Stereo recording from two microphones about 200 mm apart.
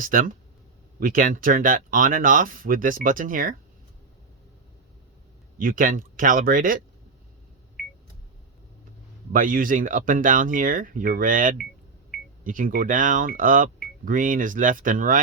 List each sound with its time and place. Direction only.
0.0 s speech: 45° right (ahead or behind)
5.5 s speech: 45° right (ahead or behind)
9.3 s speech: 45° right (ahead or behind)